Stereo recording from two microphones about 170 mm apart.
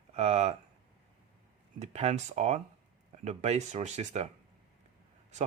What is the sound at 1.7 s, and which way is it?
Speech, 40° right (ahead or behind).